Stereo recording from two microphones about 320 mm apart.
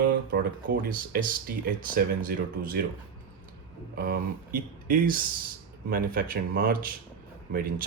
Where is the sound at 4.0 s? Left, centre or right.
Right.